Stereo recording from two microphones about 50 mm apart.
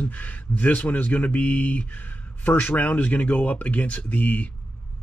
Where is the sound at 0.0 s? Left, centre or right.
Left.